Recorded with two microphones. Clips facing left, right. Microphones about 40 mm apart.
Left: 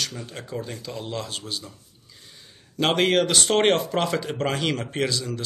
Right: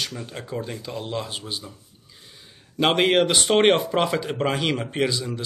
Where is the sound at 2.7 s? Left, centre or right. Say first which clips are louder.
Right 2 dB; centre.